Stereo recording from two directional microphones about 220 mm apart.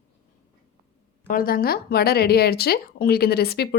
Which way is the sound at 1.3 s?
40° left (ahead or behind).